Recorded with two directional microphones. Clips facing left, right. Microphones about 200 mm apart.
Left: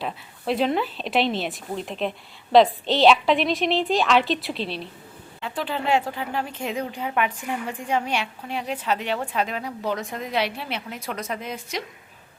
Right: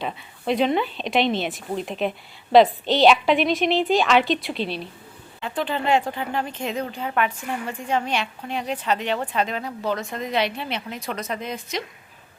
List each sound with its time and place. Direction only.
0.0 s speech: centre (ahead or behind)